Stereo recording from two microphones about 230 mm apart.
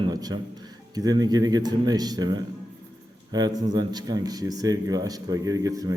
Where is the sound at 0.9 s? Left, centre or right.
Centre.